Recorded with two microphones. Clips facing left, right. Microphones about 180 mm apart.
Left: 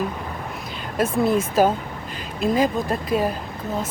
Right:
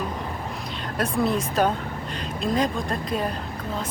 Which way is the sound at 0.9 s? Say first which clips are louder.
Left 4 dB; centre (ahead or behind).